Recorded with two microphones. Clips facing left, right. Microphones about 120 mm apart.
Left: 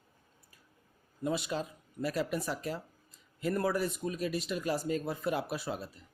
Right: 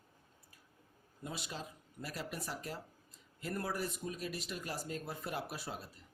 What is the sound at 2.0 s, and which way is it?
Speech, 90° left.